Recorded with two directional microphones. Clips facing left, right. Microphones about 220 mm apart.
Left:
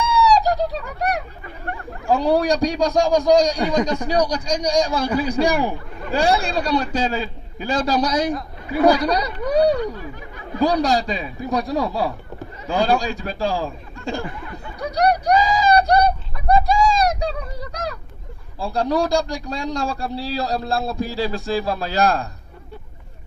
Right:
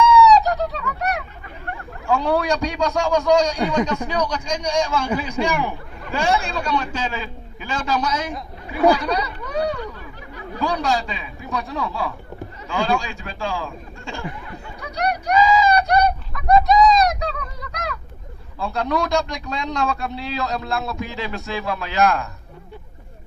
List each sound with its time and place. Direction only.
0.0 s fowl: 30° left (ahead or behind)
2.0 s speech: 35° left (ahead or behind)
14.8 s a sound: 35° left (ahead or behind)
18.6 s speech: 30° left (ahead or behind)